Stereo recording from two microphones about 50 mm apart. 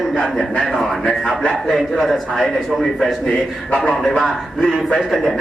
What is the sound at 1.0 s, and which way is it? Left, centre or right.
A man's voice, centre.